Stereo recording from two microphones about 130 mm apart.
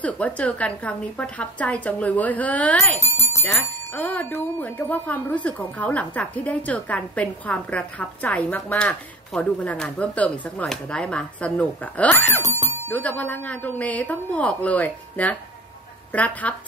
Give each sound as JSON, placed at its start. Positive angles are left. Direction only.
{"t": 0.0, "sound": "speech", "side_deg": 10}
{"t": 3.0, "sound": "speech", "side_deg": -25}
{"t": 3.4, "sound": "speech", "side_deg": 10}